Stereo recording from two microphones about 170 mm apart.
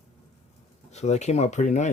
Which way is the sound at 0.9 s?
40° left (ahead or behind).